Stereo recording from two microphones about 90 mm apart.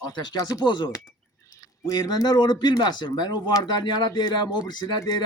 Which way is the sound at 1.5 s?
35° left (ahead or behind).